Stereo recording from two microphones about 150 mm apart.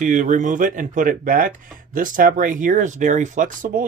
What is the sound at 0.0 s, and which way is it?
Speech, 55° right (ahead or behind).